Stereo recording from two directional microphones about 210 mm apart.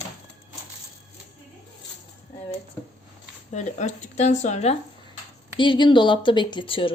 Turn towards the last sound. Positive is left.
turn(degrees=25)  # may be behind; listen again after turning